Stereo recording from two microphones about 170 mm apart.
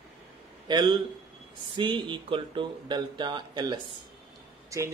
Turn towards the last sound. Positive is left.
turn(degrees=-20)  # may be behind; listen again after turning